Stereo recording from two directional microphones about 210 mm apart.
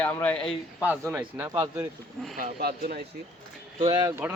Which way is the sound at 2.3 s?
45° right (ahead or behind).